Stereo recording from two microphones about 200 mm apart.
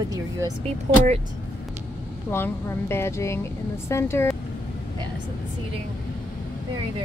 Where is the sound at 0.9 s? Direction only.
35° right (ahead or behind).